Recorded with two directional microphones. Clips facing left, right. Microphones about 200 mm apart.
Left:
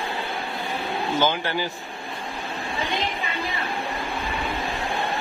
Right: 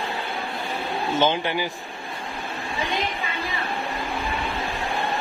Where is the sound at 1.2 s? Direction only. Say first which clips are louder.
Right 2 dB; 20° right (ahead or behind).